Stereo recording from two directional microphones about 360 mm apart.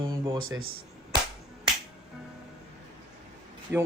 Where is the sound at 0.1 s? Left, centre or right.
Centre.